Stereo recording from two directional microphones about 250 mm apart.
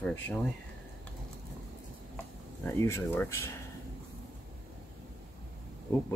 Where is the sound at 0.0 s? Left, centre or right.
Centre.